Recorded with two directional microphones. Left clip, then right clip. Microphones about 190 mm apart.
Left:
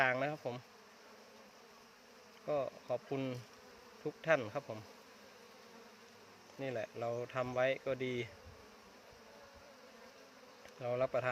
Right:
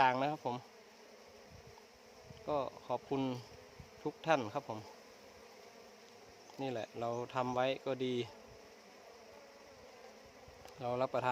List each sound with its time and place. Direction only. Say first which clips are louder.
0.0 s bee: right 3 dB; 25° right (ahead or behind)
2.5 s speech: even; 25° right (ahead or behind)
6.6 s speech: even; 25° right (ahead or behind)
10.8 s speech: even; 30° right (ahead or behind)